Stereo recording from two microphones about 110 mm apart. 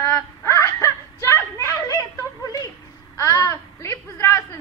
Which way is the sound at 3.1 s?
30° left (ahead or behind).